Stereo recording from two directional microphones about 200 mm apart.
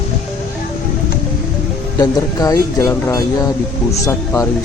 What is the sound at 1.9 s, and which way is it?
Speech, 15° left (ahead or behind).